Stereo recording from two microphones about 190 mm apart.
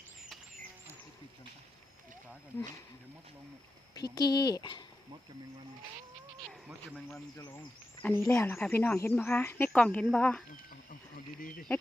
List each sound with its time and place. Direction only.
4.1 s speech: 20° left (ahead or behind)
6.5 s a sound: centre (ahead or behind)
7.3 s speech: 20° left (ahead or behind)
8.0 s speech: 10° left (ahead or behind)
11.3 s speech: 50° left (ahead or behind)